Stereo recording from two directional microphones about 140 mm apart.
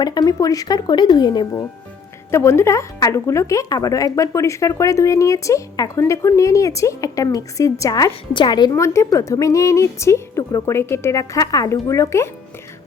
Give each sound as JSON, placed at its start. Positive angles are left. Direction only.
{"t": 0.0, "sound": "a woman's voice", "side_deg": 30}
{"t": 2.3, "sound": "a woman's voice", "side_deg": 20}